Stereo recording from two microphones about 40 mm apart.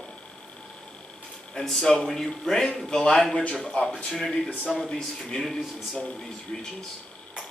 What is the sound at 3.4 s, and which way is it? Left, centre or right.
Speech, left.